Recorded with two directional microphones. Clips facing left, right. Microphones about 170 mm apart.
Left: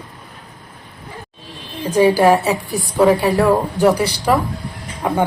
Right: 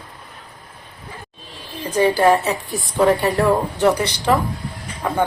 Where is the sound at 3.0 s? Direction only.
5° left (ahead or behind).